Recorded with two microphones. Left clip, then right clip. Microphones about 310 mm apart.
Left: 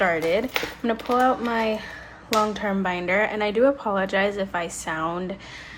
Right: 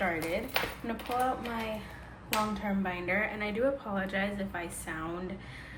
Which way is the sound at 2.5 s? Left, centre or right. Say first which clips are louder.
Left 9 dB; centre.